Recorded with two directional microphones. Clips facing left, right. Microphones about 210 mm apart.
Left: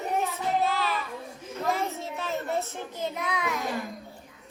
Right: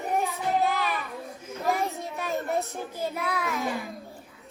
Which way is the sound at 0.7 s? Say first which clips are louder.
Even; 15° right (ahead or behind).